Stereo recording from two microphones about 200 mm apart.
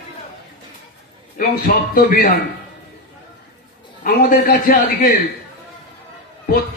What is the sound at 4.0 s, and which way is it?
A man's voice, 45° left (ahead or behind).